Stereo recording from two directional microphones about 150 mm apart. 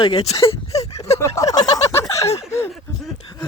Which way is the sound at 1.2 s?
25° left (ahead or behind).